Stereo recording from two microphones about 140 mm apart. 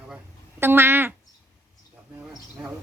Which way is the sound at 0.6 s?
15° right (ahead or behind).